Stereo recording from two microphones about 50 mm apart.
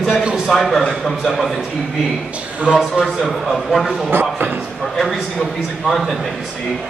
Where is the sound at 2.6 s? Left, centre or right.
Centre.